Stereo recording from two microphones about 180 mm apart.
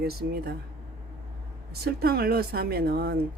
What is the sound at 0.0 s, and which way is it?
Speech, 60° right (ahead or behind).